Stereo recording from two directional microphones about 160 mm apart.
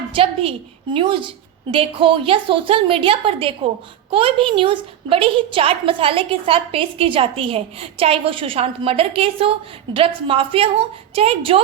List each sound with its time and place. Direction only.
0.1 s a woman's voice: 35° right (ahead or behind)